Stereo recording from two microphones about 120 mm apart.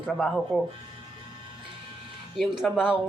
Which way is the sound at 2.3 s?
5° right (ahead or behind).